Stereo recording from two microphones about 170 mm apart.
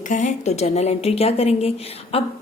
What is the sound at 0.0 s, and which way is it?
A woman's voice, 50° left (ahead or behind).